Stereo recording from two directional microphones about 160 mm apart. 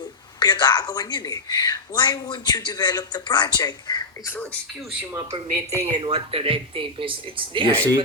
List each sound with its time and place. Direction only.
0.3 s a woman's voice: 25° left (ahead or behind)
5.1 s speech: 20° right (ahead or behind)
5.8 s speech: 35° right (ahead or behind)